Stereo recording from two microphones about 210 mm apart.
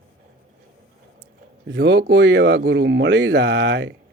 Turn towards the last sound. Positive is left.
turn(degrees=-60)  # may be behind; listen again after turning